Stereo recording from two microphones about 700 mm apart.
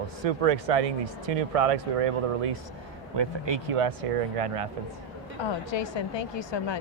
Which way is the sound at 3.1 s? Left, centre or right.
Right.